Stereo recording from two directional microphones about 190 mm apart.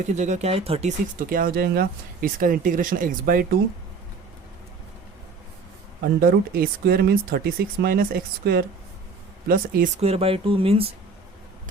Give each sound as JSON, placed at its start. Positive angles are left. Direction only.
{"t": 0.1, "sound": "speech", "side_deg": -40}
{"t": 1.3, "sound": "speech", "side_deg": -50}
{"t": 6.1, "sound": "speech", "side_deg": -50}
{"t": 10.0, "sound": "speech", "side_deg": -30}